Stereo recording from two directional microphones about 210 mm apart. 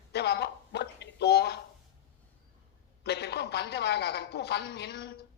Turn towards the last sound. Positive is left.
turn(degrees=50)  # may be behind; listen again after turning